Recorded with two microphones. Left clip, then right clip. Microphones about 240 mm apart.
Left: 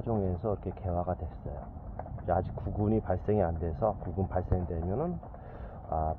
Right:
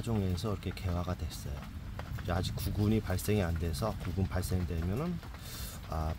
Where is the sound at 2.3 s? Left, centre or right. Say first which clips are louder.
Left 7 dB; centre.